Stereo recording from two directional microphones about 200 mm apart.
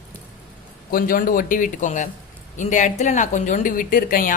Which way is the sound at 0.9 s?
45° left (ahead or behind).